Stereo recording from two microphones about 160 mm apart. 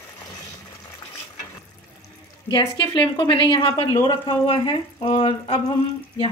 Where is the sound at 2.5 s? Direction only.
30° left (ahead or behind).